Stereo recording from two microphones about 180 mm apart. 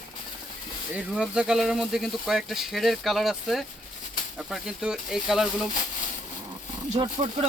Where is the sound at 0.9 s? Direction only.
5° right (ahead or behind).